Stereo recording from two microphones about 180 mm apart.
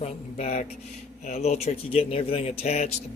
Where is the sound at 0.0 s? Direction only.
35° left (ahead or behind).